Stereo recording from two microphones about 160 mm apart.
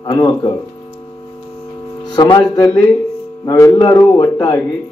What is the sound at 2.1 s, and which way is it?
A man's voice, 30° left (ahead or behind).